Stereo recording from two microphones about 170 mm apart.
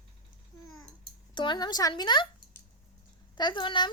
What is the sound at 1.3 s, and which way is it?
Speech, 25° left (ahead or behind).